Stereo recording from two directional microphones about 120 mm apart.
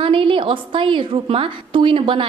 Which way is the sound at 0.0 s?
45° right (ahead or behind).